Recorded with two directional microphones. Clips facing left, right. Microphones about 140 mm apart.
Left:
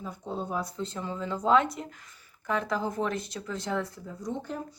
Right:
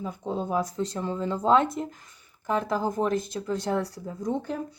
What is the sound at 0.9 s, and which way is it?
Speech, 40° right (ahead or behind).